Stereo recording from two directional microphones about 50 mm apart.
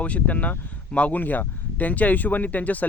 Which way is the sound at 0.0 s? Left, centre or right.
Left.